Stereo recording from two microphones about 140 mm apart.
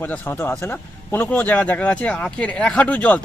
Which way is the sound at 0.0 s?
15° left (ahead or behind).